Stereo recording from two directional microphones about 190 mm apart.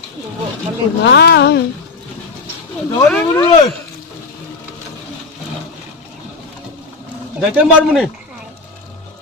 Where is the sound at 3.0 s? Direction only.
10° left (ahead or behind).